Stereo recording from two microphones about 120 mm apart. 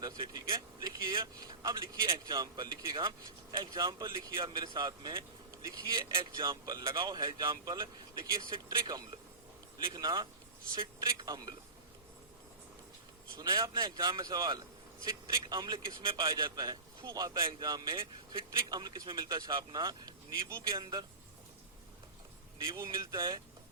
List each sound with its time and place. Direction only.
0.0 s speech: 40° right (ahead or behind)
13.4 s speech: 35° right (ahead or behind)
17.9 s speech: 45° right (ahead or behind)
18.7 s speech: 35° right (ahead or behind)
22.7 s speech: 30° right (ahead or behind)